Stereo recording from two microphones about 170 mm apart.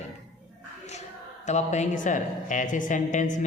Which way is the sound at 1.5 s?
45° left (ahead or behind).